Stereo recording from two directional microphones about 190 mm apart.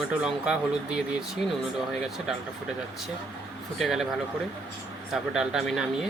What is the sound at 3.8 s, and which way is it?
Speech, centre (ahead or behind).